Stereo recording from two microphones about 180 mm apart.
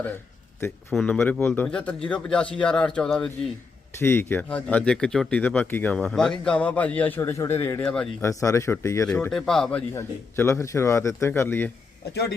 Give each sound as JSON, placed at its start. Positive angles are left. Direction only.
{"t": 0.9, "sound": "speech", "side_deg": 5}
{"t": 8.2, "sound": "speech", "side_deg": 15}
{"t": 9.9, "sound": "speech", "side_deg": 15}